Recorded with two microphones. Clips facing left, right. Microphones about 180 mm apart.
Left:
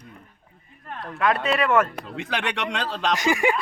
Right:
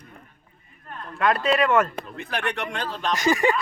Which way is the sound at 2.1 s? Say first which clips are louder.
Left 2 dB; 80° left.